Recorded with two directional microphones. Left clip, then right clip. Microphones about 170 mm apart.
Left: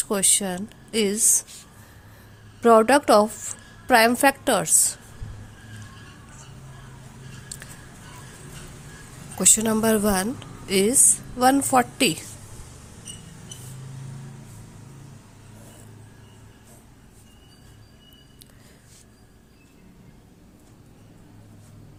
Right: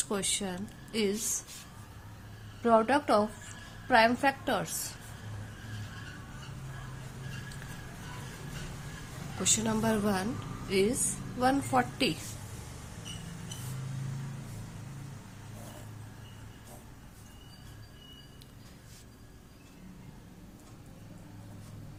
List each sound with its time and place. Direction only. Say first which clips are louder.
0.0 s a woman's voice: left 9 dB; 55° left (ahead or behind)
2.6 s a woman's voice: left 10 dB; 70° left (ahead or behind)
9.4 s a woman's voice: left 9 dB; 65° left (ahead or behind)